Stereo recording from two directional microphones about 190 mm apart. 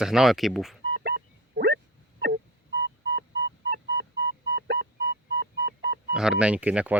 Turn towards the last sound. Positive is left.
turn(degrees=-5)  # may be behind; listen again after turning